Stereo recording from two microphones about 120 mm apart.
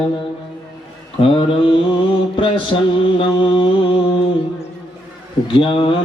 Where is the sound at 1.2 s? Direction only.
45° left (ahead or behind).